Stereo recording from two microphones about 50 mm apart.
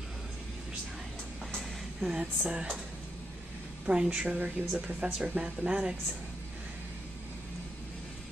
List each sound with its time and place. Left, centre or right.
1.6 s a sound: centre
2.1 s speech: right
3.8 s speech: centre